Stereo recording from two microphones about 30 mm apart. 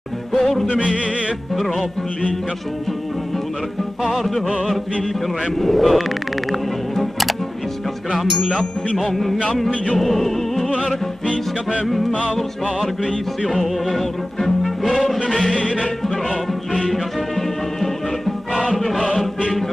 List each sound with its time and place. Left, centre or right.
0.3 s music: centre
4.0 s music: centre
13.5 s music: centre
15.5 s music: left
16.9 s music: centre